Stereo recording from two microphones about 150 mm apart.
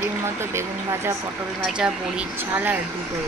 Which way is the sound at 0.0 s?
15° right (ahead or behind).